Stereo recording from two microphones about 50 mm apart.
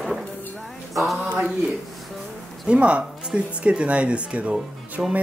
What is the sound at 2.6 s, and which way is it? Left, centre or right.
Speech, right.